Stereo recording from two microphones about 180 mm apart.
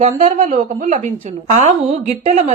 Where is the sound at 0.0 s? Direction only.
40° right (ahead or behind).